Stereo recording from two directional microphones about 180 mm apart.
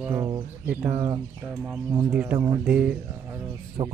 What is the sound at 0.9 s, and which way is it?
Speech, 25° right (ahead or behind).